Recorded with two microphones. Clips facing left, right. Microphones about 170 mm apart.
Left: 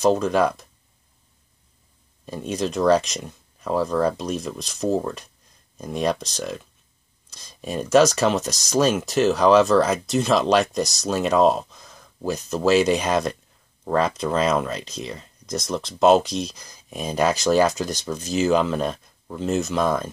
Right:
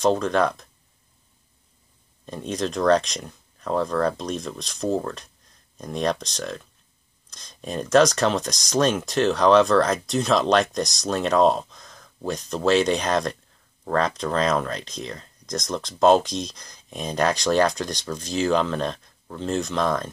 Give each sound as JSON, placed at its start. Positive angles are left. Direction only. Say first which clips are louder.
{"t": 0.0, "sound": "speech", "louder": "left 2 dB", "side_deg": 5}
{"t": 2.2, "sound": "speech", "louder": "left 1 dB", "side_deg": 5}